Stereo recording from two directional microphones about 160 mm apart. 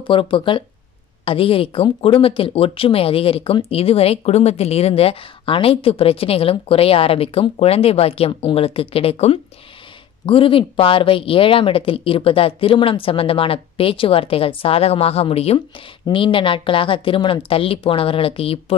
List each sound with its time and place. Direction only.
0.0 s speech: 30° left (ahead or behind)